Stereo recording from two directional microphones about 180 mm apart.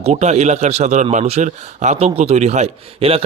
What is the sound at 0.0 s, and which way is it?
A man's voice, 35° right (ahead or behind).